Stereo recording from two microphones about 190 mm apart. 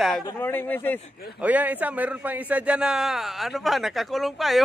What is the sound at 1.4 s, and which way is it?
A man's voice, 10° right (ahead or behind).